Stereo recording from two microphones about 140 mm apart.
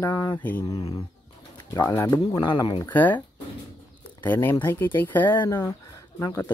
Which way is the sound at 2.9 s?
10° left (ahead or behind).